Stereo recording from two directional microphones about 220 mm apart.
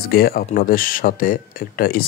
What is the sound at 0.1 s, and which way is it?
Speech, 45° left (ahead or behind).